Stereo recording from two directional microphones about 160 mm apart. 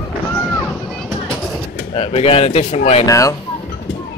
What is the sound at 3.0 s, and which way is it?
Speech, 20° left (ahead or behind).